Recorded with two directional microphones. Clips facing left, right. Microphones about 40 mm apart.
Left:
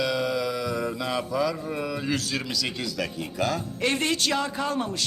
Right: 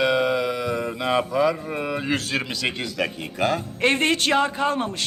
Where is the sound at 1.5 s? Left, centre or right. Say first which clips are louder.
Right 3 dB; right.